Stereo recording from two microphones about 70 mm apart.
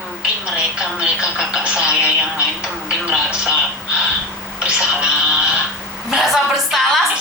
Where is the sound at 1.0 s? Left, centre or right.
Centre.